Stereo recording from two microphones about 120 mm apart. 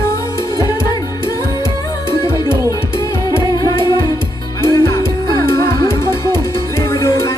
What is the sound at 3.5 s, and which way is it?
Music, 30° left (ahead or behind).